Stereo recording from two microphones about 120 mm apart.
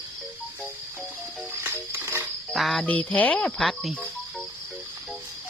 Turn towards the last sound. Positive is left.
turn(degrees=0)  # may be behind; listen again after turning